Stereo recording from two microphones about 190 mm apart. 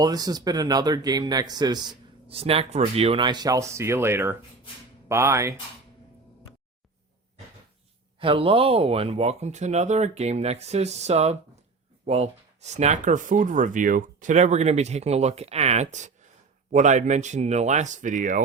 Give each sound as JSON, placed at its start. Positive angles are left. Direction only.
{"t": 0.0, "sound": "speech", "side_deg": -20}
{"t": 8.2, "sound": "speech", "side_deg": -30}